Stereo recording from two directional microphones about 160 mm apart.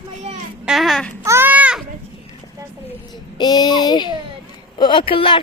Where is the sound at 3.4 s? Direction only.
25° left (ahead or behind).